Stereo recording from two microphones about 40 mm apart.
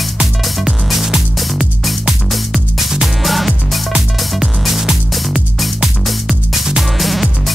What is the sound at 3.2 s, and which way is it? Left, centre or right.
Music, centre.